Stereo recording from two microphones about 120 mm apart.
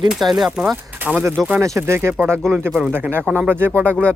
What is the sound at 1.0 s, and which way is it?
Speech, 15° right (ahead or behind).